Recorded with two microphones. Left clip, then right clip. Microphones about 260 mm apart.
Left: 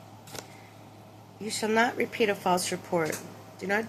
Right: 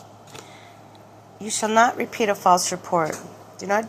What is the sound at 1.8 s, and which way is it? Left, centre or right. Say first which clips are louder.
A woman's voice: right 7 dB; centre.